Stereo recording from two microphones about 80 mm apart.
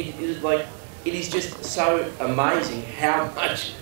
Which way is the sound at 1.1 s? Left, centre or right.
Centre.